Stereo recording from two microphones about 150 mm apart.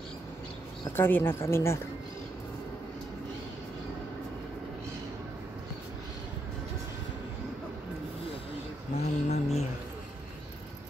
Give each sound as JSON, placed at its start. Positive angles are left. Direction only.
{"t": 0.9, "sound": "speech", "side_deg": 15}
{"t": 8.9, "sound": "mantra", "side_deg": 45}